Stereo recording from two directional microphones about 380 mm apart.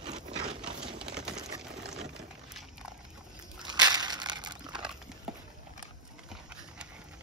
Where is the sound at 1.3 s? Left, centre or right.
Centre.